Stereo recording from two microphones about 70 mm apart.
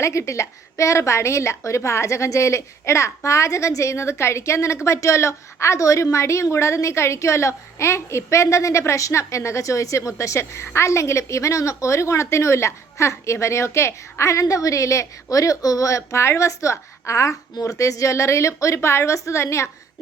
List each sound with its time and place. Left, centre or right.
0.0 s a woman's voice: left